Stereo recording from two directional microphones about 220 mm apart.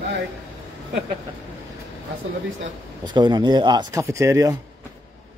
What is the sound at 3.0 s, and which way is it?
Speech, 20° right (ahead or behind).